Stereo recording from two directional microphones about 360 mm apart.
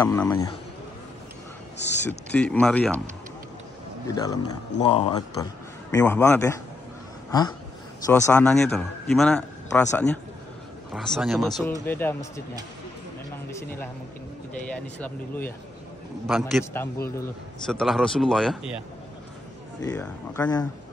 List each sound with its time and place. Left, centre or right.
0.0 s speech: centre
2.3 s a man's voice: centre
4.1 s speech: centre
7.2 s a sound: centre
8.3 s a man's voice: centre
13.5 s a man's voice: centre
19.8 s speech: centre